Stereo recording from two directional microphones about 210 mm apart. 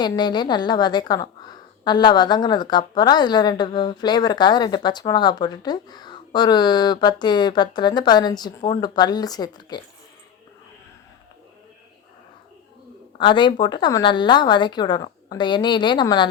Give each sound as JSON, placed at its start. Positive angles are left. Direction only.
{"t": 0.0, "sound": "a woman's voice", "side_deg": 20}
{"t": 13.1, "sound": "a woman's voice", "side_deg": 20}